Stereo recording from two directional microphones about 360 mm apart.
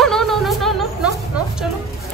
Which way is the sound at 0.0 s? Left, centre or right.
Centre.